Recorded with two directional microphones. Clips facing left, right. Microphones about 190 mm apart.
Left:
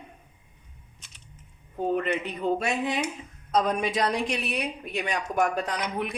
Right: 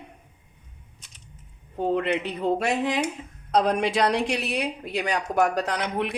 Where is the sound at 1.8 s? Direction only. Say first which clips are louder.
Right 2 dB; 85° right.